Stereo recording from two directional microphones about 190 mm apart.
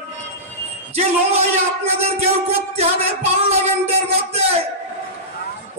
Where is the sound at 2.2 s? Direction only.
35° right (ahead or behind).